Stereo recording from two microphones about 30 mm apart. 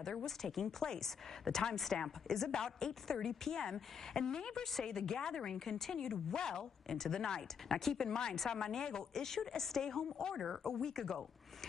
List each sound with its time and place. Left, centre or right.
0.0 s a woman's voice: centre